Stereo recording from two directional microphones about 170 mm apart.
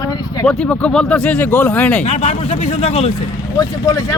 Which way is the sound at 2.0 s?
40° left (ahead or behind).